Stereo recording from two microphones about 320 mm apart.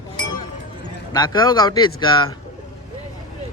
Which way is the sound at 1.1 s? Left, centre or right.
Centre.